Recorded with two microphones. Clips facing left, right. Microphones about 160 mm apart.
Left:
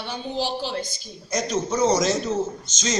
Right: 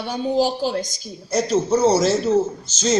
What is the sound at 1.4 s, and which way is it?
Speech, 30° right (ahead or behind).